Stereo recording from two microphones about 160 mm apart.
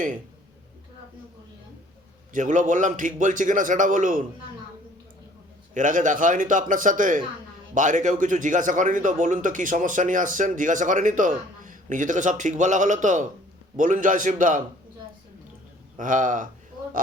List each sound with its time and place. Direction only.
2.3 s a man's voice: 50° right (ahead or behind)
5.7 s a man's voice: 55° right (ahead or behind)
16.0 s a man's voice: 55° right (ahead or behind)